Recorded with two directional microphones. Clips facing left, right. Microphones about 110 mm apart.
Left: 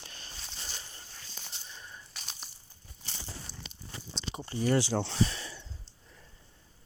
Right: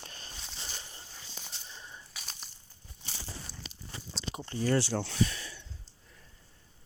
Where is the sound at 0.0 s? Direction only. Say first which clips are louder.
Right 2 dB; 40° right (ahead or behind).